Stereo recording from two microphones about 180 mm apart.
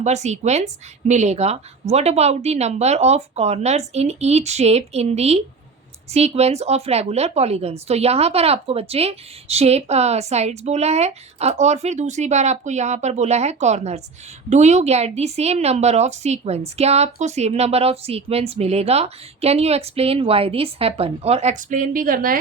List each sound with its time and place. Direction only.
0.0 s a woman's voice: 40° right (ahead or behind)